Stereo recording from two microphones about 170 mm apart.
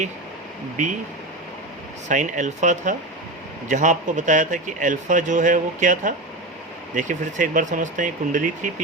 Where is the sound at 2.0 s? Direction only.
45° right (ahead or behind).